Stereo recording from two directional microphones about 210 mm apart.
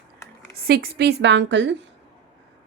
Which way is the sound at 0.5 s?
45° right (ahead or behind).